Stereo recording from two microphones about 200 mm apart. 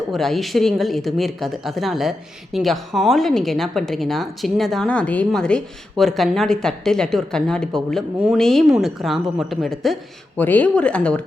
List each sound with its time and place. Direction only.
0.1 s speech: centre (ahead or behind)